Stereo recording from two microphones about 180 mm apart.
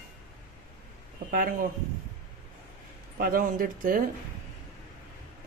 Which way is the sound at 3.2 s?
50° right (ahead or behind).